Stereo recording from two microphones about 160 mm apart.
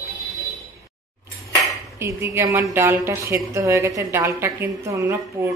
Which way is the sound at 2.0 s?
20° right (ahead or behind).